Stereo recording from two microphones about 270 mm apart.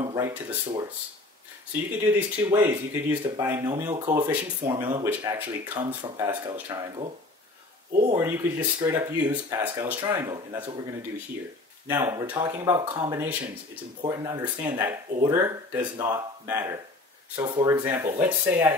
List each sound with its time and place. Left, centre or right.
0.0 s speech: centre
2.1 s speech: centre
7.9 s speech: right
8.2 s speech: centre